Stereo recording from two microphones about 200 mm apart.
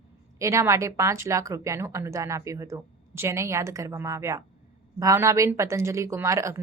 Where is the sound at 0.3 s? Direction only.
15° right (ahead or behind).